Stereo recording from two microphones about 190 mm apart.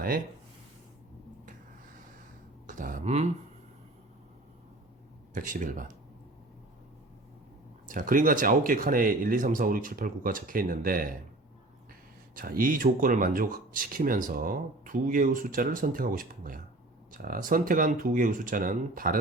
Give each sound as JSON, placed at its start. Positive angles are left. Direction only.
{"t": 2.6, "sound": "a sound", "side_deg": -45}
{"t": 5.3, "sound": "speech", "side_deg": -45}
{"t": 7.9, "sound": "speech", "side_deg": -45}
{"t": 12.3, "sound": "speech", "side_deg": -45}